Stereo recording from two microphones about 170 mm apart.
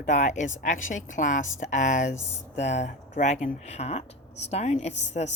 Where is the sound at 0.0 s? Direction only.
45° left (ahead or behind).